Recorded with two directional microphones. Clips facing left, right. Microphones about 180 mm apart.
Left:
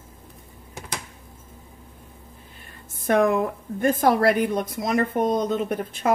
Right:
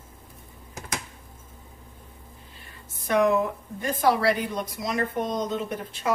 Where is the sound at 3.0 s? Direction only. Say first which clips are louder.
Left 2 dB; 50° left (ahead or behind).